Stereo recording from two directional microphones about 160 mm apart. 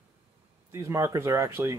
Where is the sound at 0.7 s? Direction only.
15° right (ahead or behind).